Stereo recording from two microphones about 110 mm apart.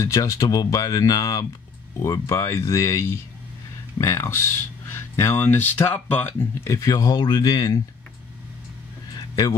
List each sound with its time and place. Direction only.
0.0 s speech: 30° left (ahead or behind)
6.9 s speech: 40° left (ahead or behind)
9.3 s speech: 30° left (ahead or behind)